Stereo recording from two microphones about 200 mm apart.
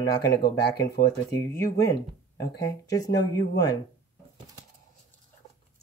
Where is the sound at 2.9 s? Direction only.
15° left (ahead or behind).